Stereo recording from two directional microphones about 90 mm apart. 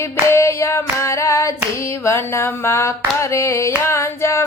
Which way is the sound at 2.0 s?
30° left (ahead or behind).